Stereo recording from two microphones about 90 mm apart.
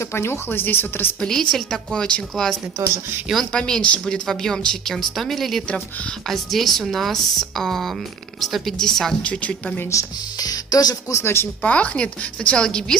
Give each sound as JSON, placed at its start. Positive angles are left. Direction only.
{"t": 0.0, "sound": "speech", "side_deg": 30}
{"t": 1.2, "sound": "a woman's voice", "side_deg": 10}
{"t": 3.5, "sound": "a woman's voice", "side_deg": 10}
{"t": 9.8, "sound": "speech", "side_deg": 40}
{"t": 11.6, "sound": "a woman's voice", "side_deg": 15}